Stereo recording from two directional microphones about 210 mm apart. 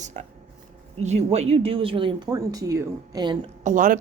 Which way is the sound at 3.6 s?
40° right (ahead or behind).